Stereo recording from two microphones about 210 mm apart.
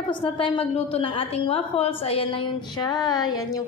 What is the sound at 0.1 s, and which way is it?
A woman's voice, 25° left (ahead or behind).